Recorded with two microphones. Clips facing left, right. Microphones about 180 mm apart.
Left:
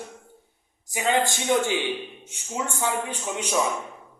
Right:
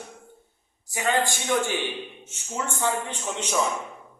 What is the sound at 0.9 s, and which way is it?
A man's voice, 15° left (ahead or behind).